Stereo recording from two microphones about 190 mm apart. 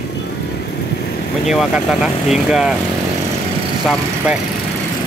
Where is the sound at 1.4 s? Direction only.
5° right (ahead or behind).